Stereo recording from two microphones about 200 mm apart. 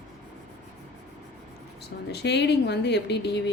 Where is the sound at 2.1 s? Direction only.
55° left (ahead or behind).